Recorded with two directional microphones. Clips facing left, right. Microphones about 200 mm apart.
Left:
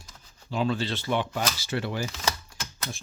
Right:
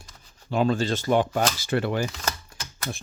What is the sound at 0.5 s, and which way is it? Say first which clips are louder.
Speech: right 5 dB; 50° right (ahead or behind).